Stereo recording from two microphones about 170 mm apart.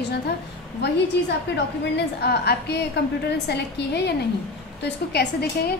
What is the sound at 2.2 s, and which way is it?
A woman's voice, 75° left (ahead or behind).